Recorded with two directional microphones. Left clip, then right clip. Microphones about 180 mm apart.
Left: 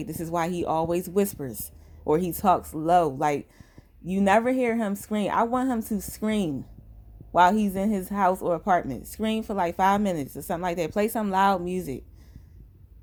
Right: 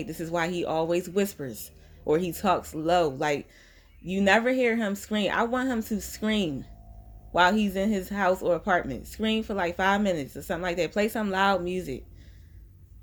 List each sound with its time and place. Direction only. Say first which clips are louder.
0.0 s speech: left 1 dB; 45° left (ahead or behind)